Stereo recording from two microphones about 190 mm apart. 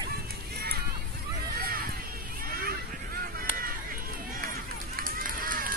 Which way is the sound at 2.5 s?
50° right (ahead or behind).